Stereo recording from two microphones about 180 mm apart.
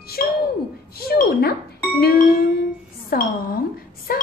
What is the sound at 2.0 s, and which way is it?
Speech, 55° left (ahead or behind).